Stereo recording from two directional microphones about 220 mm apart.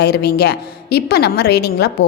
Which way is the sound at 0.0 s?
50° left (ahead or behind).